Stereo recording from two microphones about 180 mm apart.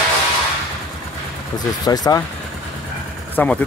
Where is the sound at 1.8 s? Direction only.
20° left (ahead or behind).